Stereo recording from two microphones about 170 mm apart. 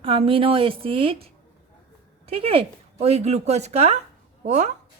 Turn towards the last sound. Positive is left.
turn(degrees=-40)  # may be behind; listen again after turning